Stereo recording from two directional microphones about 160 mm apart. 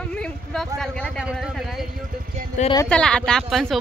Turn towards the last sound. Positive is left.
turn(degrees=0)  # may be behind; listen again after turning